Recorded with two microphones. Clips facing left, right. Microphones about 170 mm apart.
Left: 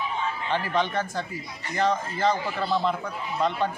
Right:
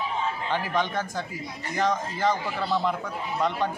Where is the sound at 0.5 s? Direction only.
10° right (ahead or behind).